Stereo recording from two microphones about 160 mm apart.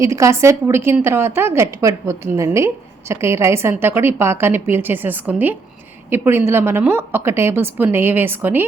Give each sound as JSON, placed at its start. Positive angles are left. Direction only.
{"t": 0.0, "sound": "a woman's voice", "side_deg": -20}